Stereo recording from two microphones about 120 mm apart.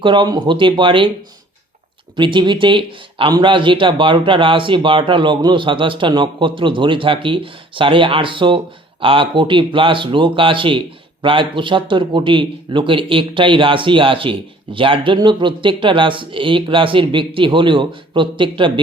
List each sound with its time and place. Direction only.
0.0 s speech: 40° right (ahead or behind)
2.1 s speech: 40° right (ahead or behind)